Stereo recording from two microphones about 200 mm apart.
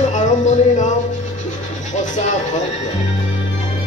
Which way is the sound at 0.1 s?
35° left (ahead or behind).